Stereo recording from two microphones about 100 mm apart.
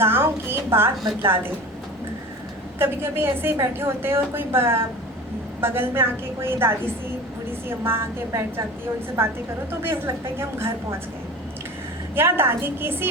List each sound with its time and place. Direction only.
0.0 s a woman's voice: 25° right (ahead or behind)
2.7 s a woman's voice: 25° right (ahead or behind)
7.9 s a woman's voice: 25° right (ahead or behind)
9.8 s a woman's voice: 25° right (ahead or behind)
12.1 s a woman's voice: 25° right (ahead or behind)